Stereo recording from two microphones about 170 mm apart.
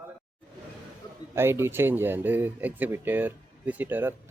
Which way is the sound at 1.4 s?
15° right (ahead or behind).